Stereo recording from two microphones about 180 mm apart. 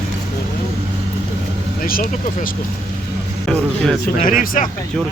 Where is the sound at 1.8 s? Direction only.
55° left (ahead or behind).